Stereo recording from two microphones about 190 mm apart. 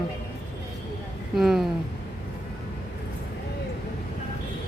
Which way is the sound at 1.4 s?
Centre (ahead or behind).